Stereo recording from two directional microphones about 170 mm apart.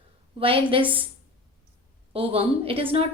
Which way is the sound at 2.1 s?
35° right (ahead or behind).